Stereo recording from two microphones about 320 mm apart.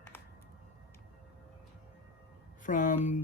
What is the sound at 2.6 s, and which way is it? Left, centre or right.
Speech, left.